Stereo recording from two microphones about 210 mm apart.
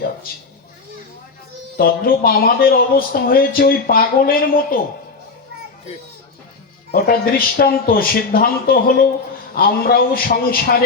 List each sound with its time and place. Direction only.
1.8 s speech: 45° left (ahead or behind)
6.9 s speech: 45° left (ahead or behind)